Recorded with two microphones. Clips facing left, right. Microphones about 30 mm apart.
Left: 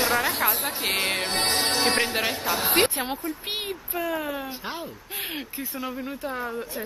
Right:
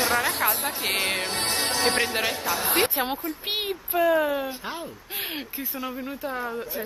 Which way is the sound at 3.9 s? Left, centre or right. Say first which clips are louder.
Right 8 dB; centre.